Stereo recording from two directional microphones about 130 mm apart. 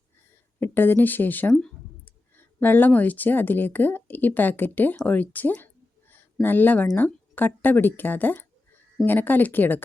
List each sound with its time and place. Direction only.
0.6 s speech: 15° left (ahead or behind)